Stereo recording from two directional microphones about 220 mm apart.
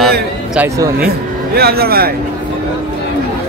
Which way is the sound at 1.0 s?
45° right (ahead or behind).